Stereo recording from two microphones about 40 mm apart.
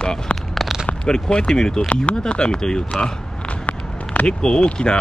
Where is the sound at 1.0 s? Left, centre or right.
Left.